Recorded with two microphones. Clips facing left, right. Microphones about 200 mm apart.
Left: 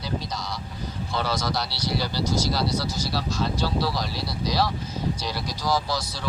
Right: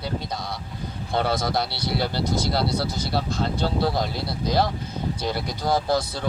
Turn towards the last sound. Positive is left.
turn(degrees=-55)  # may be behind; listen again after turning